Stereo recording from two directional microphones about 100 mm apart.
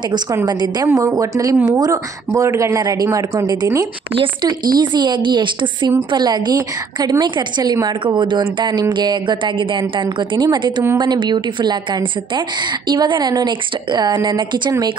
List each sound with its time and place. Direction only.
0.5 s a woman's voice: 45° right (ahead or behind)
4.1 s speech: 60° right (ahead or behind)
4.5 s a woman's voice: 45° right (ahead or behind)
10.0 s a woman's voice: 45° right (ahead or behind)